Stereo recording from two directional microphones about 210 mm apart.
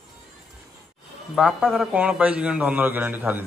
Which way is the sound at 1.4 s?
Centre (ahead or behind).